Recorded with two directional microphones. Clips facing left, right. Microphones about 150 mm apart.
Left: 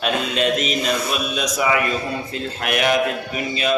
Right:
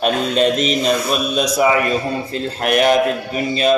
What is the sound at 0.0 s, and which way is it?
A man's voice, 40° right (ahead or behind).